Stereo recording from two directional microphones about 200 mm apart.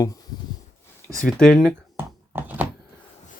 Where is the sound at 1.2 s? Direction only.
5° left (ahead or behind).